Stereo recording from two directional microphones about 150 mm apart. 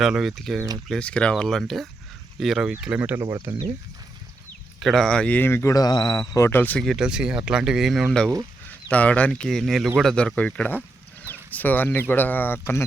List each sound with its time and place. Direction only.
0.0 s speech: centre (ahead or behind)
4.8 s speech: centre (ahead or behind)
6.8 s speech: 5° right (ahead or behind); by 12.8 s 15° left (ahead or behind)